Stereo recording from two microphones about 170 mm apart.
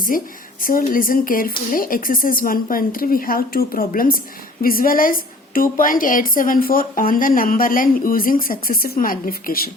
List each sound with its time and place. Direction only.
0.1 s speech: 55° left (ahead or behind)